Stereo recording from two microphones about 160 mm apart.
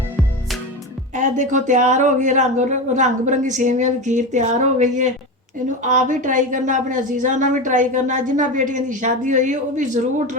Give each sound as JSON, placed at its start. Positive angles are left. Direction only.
{"t": 1.1, "sound": "a woman's voice", "side_deg": -50}